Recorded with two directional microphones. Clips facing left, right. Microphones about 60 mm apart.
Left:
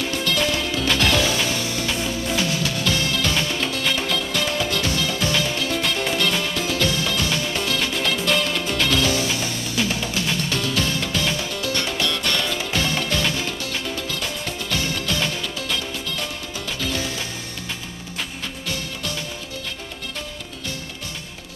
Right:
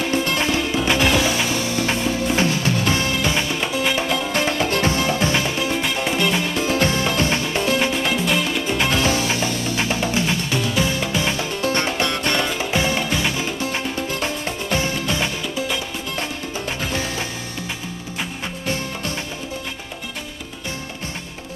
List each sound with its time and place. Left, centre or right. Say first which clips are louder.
0.2 s music: right 2 dB; right
1.9 s music: right 4 dB; right
4.3 s music: right 3 dB; right